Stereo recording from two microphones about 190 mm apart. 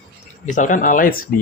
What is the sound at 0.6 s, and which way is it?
Speech, 45° left (ahead or behind).